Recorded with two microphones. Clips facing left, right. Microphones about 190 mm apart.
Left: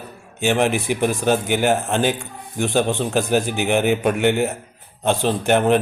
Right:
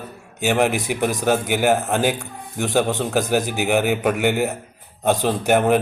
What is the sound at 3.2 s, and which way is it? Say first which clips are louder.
A man's voice: left 1 dB; 15° right (ahead or behind).